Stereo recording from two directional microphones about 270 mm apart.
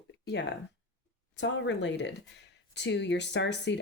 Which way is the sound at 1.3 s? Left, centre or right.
Left.